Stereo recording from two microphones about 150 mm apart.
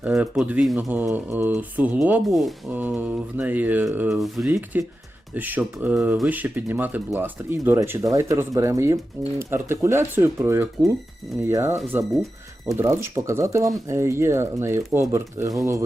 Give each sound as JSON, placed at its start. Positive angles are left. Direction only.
{"t": 0.0, "sound": "speech", "side_deg": -5}
{"t": 4.1, "sound": "speech", "side_deg": 0}
{"t": 4.5, "sound": "speech", "side_deg": -20}
{"t": 12.1, "sound": "speech", "side_deg": 0}
{"t": 12.7, "sound": "speech", "side_deg": -15}